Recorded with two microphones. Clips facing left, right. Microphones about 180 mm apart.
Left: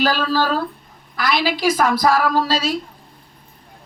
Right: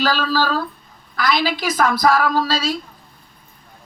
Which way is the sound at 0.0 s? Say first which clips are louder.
Left 1 dB; 15° left (ahead or behind).